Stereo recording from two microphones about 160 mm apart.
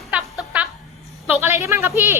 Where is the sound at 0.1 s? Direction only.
10° right (ahead or behind).